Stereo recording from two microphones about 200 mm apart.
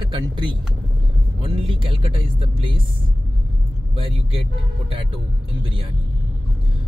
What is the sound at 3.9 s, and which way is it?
Speech, 25° right (ahead or behind).